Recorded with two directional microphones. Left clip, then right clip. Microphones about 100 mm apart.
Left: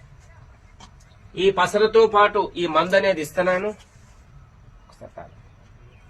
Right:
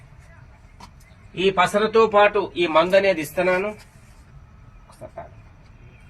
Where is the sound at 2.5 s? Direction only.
30° left (ahead or behind).